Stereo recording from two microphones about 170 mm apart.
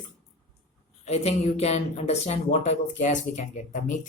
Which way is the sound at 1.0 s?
40° left (ahead or behind).